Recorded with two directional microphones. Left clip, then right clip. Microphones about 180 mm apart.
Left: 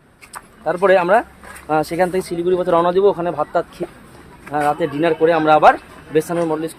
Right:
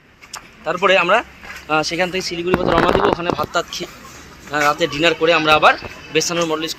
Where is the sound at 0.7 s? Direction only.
60° left (ahead or behind).